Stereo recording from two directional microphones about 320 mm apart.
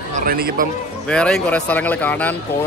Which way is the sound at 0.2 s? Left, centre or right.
Right.